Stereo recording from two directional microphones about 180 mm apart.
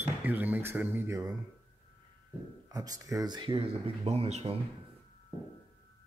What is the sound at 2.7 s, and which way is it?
Speech, 20° right (ahead or behind).